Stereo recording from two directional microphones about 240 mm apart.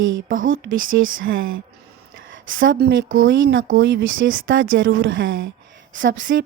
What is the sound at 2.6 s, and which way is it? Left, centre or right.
A woman's voice, right.